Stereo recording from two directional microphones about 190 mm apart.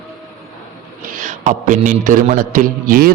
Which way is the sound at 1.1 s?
40° right (ahead or behind).